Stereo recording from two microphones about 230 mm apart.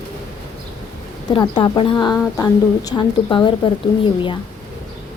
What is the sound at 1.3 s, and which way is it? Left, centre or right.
A woman's voice, centre.